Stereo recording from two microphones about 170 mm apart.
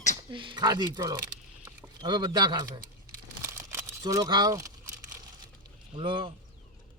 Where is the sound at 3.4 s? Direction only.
15° right (ahead or behind).